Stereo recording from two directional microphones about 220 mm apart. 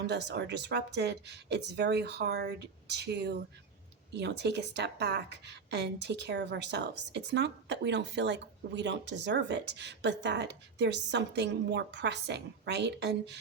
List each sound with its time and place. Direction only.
0.1 s a woman's voice: 50° right (ahead or behind)